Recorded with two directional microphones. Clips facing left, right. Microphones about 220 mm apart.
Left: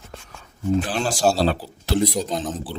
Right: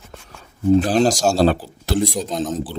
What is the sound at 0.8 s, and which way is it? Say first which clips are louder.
Speech: right 8 dB; 40° right (ahead or behind).